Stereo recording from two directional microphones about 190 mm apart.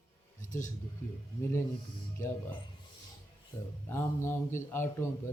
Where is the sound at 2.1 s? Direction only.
10° left (ahead or behind).